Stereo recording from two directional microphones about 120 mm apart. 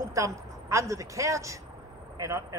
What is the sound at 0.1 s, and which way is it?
A woman's voice, 25° right (ahead or behind).